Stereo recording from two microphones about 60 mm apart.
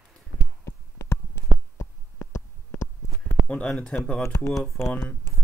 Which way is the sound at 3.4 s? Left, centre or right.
Left.